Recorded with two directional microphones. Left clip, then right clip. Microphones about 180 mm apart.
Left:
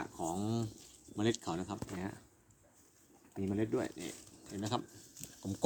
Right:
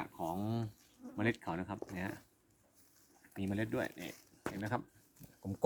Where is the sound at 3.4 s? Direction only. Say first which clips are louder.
Left 2 dB; 30° right (ahead or behind).